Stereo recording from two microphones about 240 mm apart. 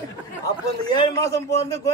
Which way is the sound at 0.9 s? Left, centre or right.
Centre.